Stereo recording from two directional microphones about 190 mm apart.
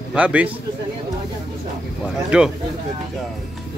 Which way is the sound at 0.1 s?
5° right (ahead or behind).